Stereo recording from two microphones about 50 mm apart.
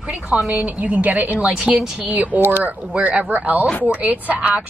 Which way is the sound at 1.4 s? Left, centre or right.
Centre.